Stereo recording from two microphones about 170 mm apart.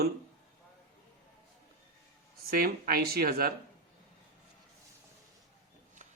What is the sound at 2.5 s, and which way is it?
Speech, 60° right (ahead or behind).